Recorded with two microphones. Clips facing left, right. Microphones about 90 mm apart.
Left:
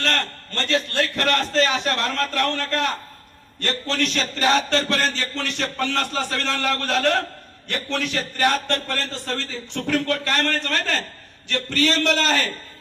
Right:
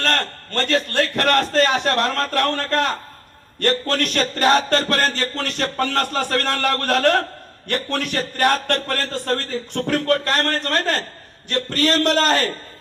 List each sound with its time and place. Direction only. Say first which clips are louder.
0.0 s a man's voice: right 3 dB; 45° right (ahead or behind)